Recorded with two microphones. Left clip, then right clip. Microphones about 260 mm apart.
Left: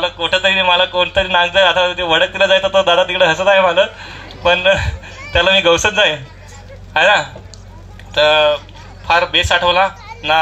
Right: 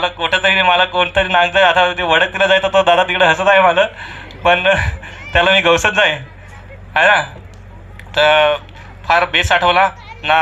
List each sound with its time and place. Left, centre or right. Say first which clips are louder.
0.0 s a man's voice: even; right